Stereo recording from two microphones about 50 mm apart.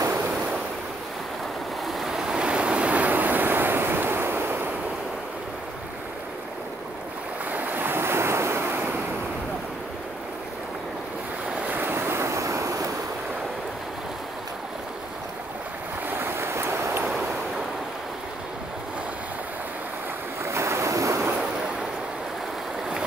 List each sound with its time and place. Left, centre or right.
1.9 s waves: centre; by 4.7 s right
7.5 s waves: right
11.6 s waves: right
12.3 s vehicle: right
16.1 s vehicle: right
20.4 s waves: right